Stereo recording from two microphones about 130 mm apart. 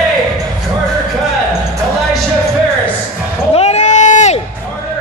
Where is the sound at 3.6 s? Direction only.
60° left (ahead or behind).